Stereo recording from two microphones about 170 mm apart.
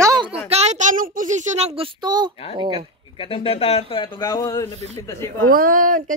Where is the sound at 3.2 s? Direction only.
30° left (ahead or behind); by 5.3 s 15° left (ahead or behind).